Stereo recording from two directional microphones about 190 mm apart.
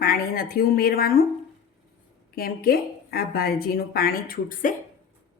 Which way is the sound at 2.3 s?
50° left (ahead or behind).